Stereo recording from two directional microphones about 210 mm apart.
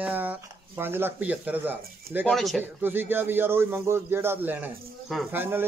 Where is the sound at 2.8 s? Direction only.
10° right (ahead or behind).